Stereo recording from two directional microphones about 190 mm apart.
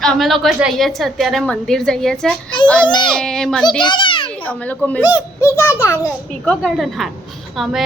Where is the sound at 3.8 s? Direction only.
25° left (ahead or behind).